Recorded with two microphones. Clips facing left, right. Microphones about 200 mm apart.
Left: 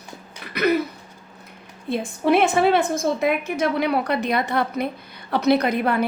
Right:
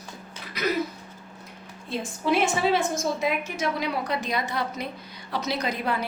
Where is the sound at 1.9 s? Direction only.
60° left (ahead or behind).